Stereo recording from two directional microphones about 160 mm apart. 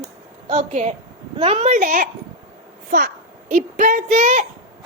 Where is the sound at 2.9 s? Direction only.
70° right (ahead or behind).